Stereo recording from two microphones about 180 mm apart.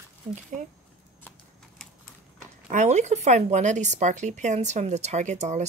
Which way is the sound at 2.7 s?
40° right (ahead or behind).